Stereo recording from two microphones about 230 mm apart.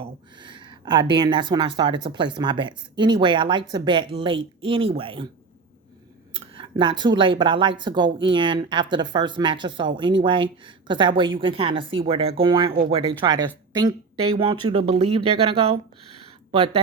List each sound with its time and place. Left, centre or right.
0.0 s speech: centre
6.3 s speech: right